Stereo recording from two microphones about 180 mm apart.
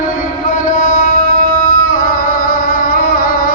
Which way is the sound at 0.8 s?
50° left (ahead or behind).